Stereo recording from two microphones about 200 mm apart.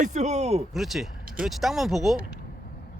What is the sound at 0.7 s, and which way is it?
Speech, centre (ahead or behind).